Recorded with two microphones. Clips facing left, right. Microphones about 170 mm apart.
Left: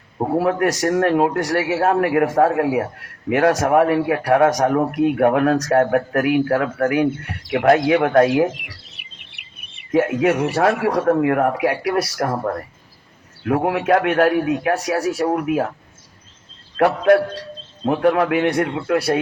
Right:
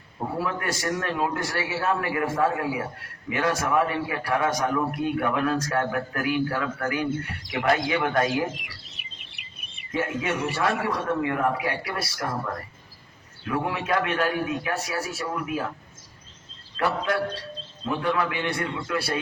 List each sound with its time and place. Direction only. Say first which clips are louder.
0.3 s a man's voice: left 11 dB; 65° left (ahead or behind)
16.7 s a man's voice: left 11 dB; 60° left (ahead or behind); by 18.5 s 80° left
18.5 s a man's voice: left 9 dB; 60° left (ahead or behind)